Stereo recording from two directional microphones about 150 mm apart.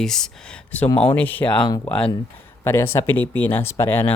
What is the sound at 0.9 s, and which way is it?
Speech, 35° left (ahead or behind).